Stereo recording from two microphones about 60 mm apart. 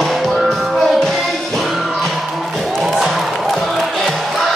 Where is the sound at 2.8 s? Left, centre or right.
Centre.